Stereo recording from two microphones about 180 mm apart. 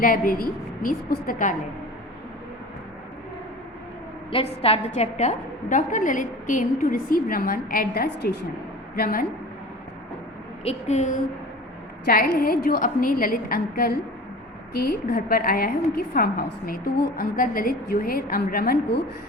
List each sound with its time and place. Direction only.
0.0 s a woman's voice: 55° left (ahead or behind)
4.3 s a woman's voice: 30° left (ahead or behind); by 8.4 s 70° left (ahead or behind)
9.0 s a woman's voice: 55° left (ahead or behind)
10.6 s a woman's voice: 35° left (ahead or behind)
12.0 s a woman's voice: 60° left (ahead or behind)